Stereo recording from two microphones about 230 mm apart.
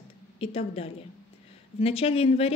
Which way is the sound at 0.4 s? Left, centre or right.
Left.